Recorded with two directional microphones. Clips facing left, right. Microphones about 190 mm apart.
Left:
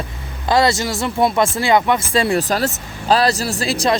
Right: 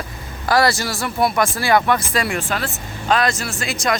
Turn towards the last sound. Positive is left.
turn(degrees=35)  # may be behind; listen again after turning